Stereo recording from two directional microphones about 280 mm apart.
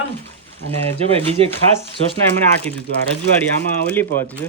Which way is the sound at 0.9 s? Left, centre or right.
Right.